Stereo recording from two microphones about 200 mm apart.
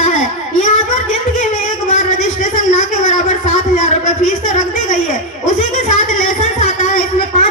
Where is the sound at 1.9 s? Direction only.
40° left (ahead or behind).